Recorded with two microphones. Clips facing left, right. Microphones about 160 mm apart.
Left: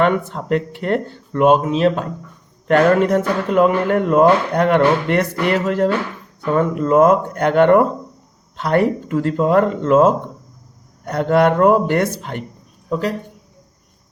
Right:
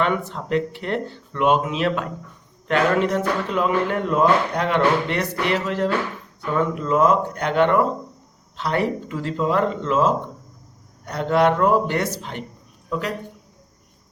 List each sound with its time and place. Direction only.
0.0 s speech: 50° left (ahead or behind); by 2.0 s 35° left (ahead or behind)
2.6 s speech: 50° left (ahead or behind)